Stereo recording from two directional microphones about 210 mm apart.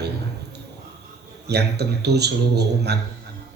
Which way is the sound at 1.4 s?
50° right (ahead or behind).